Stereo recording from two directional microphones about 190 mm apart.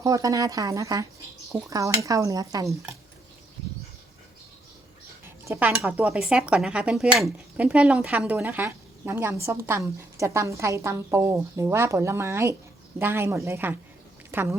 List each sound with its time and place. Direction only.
0.0 s speech: 20° right (ahead or behind)
5.2 s a woman's voice: 10° right (ahead or behind)